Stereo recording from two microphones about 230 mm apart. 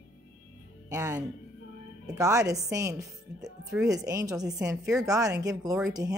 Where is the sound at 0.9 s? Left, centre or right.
Centre.